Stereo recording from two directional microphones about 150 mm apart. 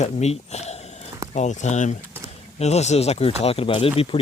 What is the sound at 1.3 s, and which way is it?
Speech, 50° left (ahead or behind).